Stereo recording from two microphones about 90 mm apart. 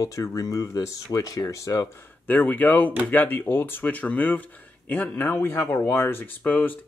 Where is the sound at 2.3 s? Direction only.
20° left (ahead or behind).